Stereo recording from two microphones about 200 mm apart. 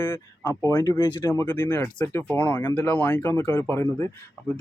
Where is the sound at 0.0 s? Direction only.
15° left (ahead or behind).